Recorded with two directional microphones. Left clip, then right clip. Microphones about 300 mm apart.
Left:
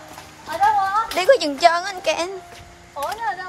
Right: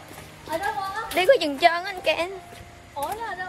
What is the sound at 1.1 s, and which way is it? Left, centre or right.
A woman's voice, centre.